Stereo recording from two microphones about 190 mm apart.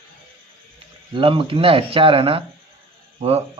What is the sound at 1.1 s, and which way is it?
Speech, 30° right (ahead or behind).